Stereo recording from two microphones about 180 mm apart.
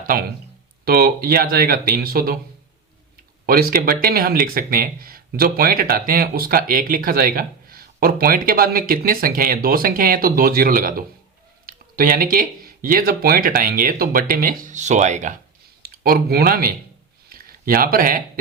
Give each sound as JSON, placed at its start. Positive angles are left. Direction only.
{"t": 0.1, "sound": "speech", "side_deg": -50}
{"t": 3.4, "sound": "speech", "side_deg": -55}
{"t": 15.8, "sound": "speech", "side_deg": -60}
{"t": 17.2, "sound": "a sound", "side_deg": -55}